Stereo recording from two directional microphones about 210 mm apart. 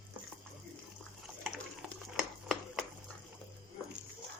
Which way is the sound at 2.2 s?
Centre (ahead or behind).